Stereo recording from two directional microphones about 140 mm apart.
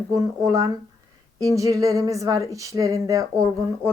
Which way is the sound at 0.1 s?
25° right (ahead or behind).